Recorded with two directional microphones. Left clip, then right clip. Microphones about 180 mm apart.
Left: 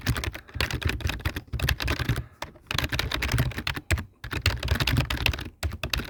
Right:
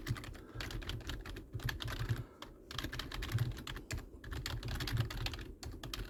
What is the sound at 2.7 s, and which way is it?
Computer keyboard, 50° left (ahead or behind).